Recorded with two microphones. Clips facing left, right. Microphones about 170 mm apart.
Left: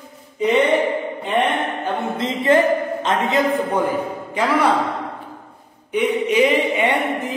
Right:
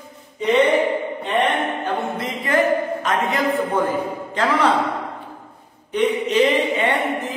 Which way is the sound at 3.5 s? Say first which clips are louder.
Left 1 dB; 10° left (ahead or behind).